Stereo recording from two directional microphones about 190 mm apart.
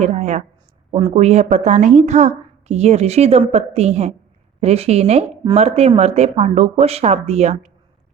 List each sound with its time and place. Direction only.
0.0 s a woman's voice: 35° right (ahead or behind)